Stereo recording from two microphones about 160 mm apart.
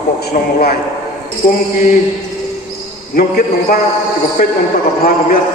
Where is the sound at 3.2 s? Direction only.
70° left (ahead or behind).